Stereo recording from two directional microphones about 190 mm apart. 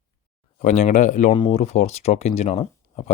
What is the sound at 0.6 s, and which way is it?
Speech, 40° left (ahead or behind).